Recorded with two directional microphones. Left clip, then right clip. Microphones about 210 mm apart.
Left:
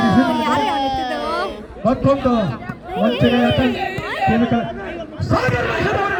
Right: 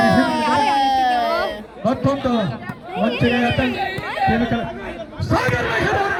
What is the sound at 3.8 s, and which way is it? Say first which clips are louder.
Music: even; 30° left (ahead or behind).